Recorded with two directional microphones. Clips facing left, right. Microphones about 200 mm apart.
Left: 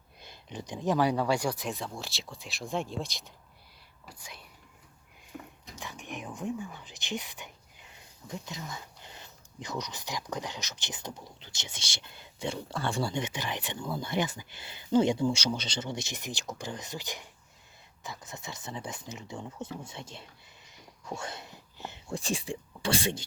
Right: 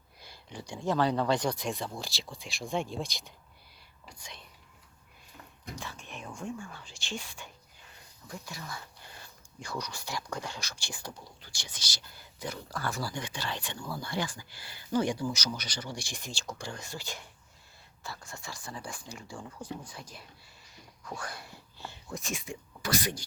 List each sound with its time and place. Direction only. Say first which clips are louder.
0.2 s speech: left 3 dB; 20° left (ahead or behind)
5.3 s a sound: left 9 dB; 60° left (ahead or behind)
5.8 s speech: left 7 dB; 15° left (ahead or behind)